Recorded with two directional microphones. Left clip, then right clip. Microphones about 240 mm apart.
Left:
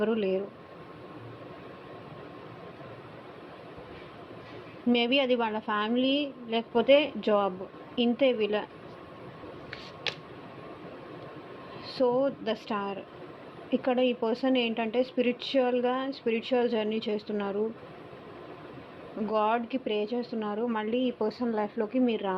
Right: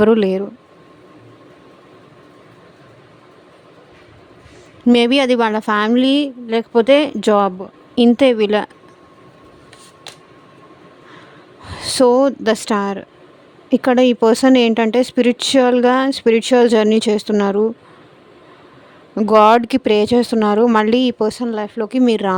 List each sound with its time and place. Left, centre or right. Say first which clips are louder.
0.0 s speech: right 15 dB; right
4.9 s speech: right 12 dB; right
11.8 s speech: right 14 dB; right
19.2 s speech: right 17 dB; right
21.2 s speech: right 11 dB; right